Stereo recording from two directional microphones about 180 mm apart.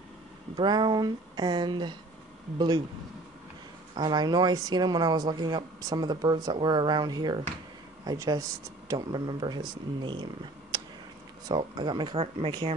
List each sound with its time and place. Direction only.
0.6 s speech: 25° right (ahead or behind)
3.9 s speech: 25° right (ahead or behind)